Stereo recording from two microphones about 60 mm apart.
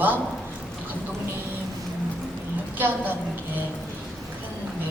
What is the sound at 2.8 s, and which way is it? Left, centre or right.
Speech, right.